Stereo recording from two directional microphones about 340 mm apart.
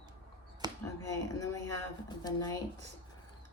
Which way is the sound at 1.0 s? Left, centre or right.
Centre.